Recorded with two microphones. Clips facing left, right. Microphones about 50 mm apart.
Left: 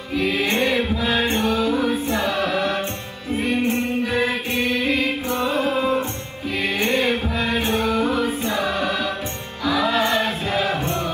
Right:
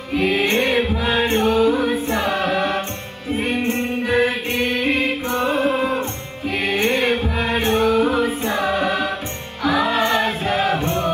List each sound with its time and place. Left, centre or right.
0.1 s music: right
6.8 s music: right